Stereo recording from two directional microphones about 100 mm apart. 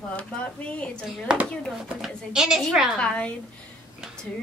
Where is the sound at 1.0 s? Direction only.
5° right (ahead or behind).